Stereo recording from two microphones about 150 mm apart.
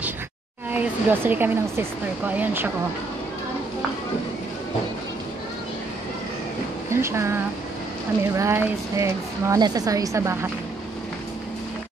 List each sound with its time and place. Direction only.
0.7 s speech: 10° right (ahead or behind)
6.9 s a woman's voice: 20° right (ahead or behind)